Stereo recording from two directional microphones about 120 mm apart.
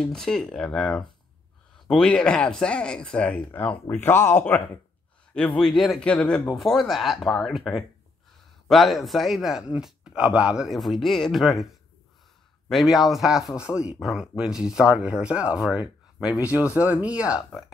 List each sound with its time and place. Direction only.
0.0 s a man's voice: 5° left (ahead or behind)
5.6 s a man's voice: centre (ahead or behind)
12.6 s a man's voice: centre (ahead or behind)
16.7 s speech: 10° right (ahead or behind)